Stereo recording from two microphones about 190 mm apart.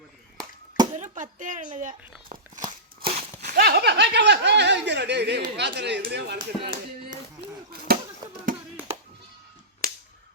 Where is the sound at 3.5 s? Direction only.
55° right (ahead or behind).